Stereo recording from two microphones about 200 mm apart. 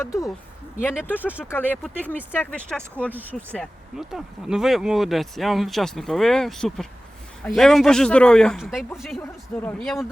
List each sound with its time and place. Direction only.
0.0 s speech: 15° left (ahead or behind)